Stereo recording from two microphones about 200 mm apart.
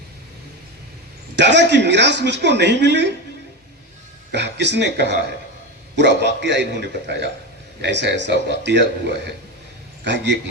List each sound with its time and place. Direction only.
1.4 s speech: 60° right (ahead or behind)
4.3 s speech: 60° right (ahead or behind)